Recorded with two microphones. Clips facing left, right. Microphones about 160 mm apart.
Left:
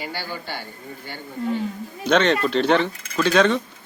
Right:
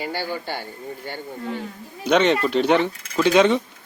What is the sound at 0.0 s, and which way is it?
Speech, 50° right (ahead or behind).